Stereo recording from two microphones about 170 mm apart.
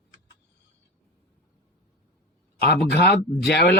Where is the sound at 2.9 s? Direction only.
75° left (ahead or behind).